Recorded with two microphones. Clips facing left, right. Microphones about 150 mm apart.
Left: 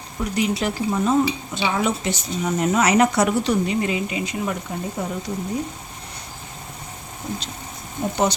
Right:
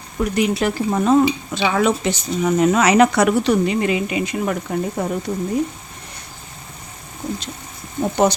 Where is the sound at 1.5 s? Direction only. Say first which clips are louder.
Right 3 dB; 90° right; by 4.5 s 60° right (ahead or behind).